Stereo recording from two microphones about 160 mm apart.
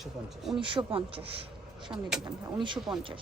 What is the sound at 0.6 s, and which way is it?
Speech, 30° right (ahead or behind).